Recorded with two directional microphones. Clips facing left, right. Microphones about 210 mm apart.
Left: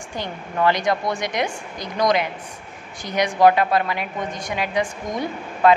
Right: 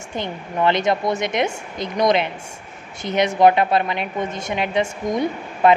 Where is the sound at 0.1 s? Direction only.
20° right (ahead or behind).